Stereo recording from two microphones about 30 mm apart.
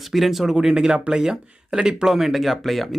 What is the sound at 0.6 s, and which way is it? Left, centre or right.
Speech, right.